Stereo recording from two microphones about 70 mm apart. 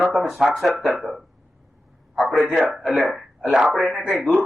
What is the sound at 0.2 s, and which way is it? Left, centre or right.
A man's voice, centre.